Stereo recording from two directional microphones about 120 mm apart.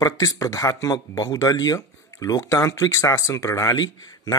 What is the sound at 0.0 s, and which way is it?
Speech, 30° left (ahead or behind).